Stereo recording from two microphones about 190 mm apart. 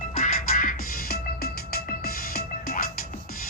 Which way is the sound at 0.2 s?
45° left (ahead or behind).